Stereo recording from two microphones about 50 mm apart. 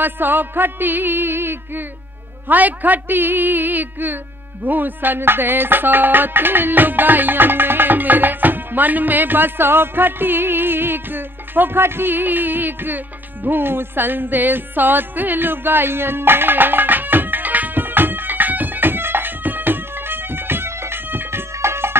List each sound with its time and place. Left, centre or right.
0.0 s music: right
2.4 s a woman's voice: right
4.6 s music: right